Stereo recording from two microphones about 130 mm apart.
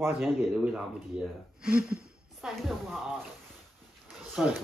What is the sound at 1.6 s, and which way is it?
A man's voice, 5° right (ahead or behind).